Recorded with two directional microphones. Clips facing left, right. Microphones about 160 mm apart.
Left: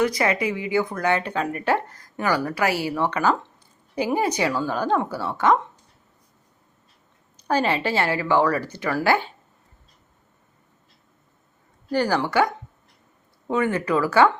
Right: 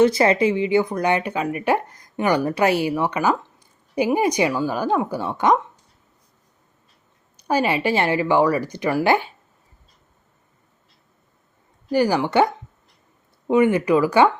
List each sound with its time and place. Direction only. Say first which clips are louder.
0.0 s speech: right 6 dB; 30° right (ahead or behind)
7.4 s speech: right 2 dB; 10° right (ahead or behind)
11.9 s speech: right 3 dB; 15° right (ahead or behind)